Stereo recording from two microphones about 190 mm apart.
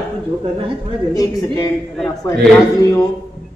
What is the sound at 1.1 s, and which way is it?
Speech, 20° left (ahead or behind).